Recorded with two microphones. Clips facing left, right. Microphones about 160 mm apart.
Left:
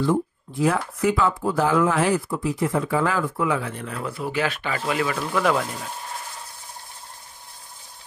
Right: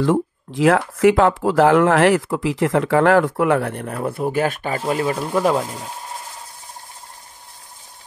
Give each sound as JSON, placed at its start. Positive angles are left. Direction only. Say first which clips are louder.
{"t": 0.0, "sound": "speech", "louder": "right 4 dB", "side_deg": -90}
{"t": 5.6, "sound": "rub", "louder": "right 2 dB", "side_deg": -20}